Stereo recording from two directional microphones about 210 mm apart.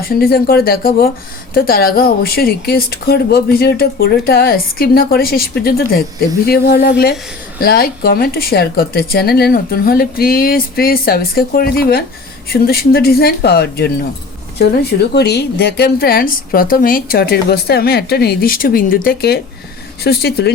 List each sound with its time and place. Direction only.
0.0 s a woman's voice: 45° left (ahead or behind)